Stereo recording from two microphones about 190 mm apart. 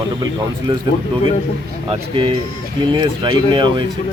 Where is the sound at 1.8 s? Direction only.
30° right (ahead or behind).